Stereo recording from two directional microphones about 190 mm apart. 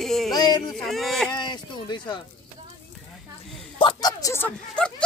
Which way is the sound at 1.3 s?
25° left (ahead or behind).